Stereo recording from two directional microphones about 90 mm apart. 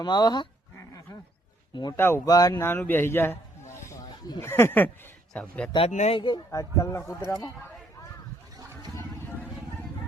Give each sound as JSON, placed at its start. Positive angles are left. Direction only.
{"t": 0.0, "sound": "speech", "side_deg": 50}
{"t": 1.7, "sound": "speech", "side_deg": 55}
{"t": 2.0, "sound": "speech", "side_deg": 25}
{"t": 2.2, "sound": "speech", "side_deg": 40}
{"t": 2.6, "sound": "a man's voice", "side_deg": 25}
{"t": 5.3, "sound": "speech", "side_deg": 10}
{"t": 5.7, "sound": "speech", "side_deg": 80}
{"t": 6.2, "sound": "speech", "side_deg": 45}